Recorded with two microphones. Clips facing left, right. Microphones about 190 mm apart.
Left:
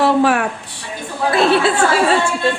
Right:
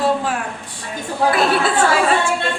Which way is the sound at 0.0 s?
70° left (ahead or behind).